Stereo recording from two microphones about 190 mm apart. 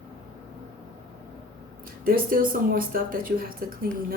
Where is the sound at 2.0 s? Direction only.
50° right (ahead or behind).